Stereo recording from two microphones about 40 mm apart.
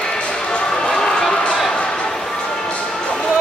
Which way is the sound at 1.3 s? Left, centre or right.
Centre.